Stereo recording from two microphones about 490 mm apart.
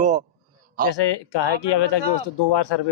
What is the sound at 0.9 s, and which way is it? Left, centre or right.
Speech, left.